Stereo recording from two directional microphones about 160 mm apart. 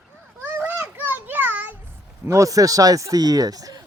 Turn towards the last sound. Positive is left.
turn(degrees=-25)  # may be behind; listen again after turning